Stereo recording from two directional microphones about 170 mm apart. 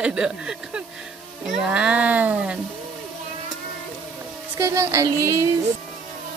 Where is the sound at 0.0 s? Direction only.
5° right (ahead or behind).